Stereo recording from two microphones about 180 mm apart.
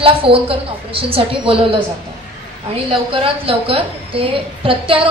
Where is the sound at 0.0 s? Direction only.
30° right (ahead or behind).